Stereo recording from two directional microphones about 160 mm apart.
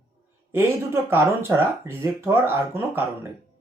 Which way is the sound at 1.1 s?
15° right (ahead or behind).